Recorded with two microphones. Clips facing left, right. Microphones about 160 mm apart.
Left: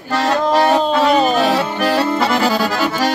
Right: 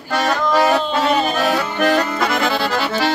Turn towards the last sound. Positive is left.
turn(degrees=40)  # may be behind; listen again after turning